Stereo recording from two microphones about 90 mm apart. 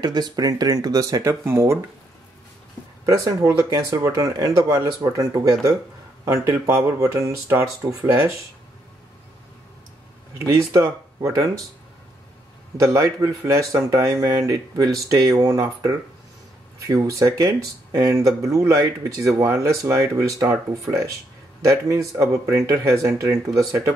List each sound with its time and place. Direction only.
0.0 s speech: 50° right (ahead or behind); by 1.8 s 30° right (ahead or behind)
3.1 s speech: 40° right (ahead or behind)
10.7 s speech: 35° right (ahead or behind)
12.7 s speech: 35° right (ahead or behind)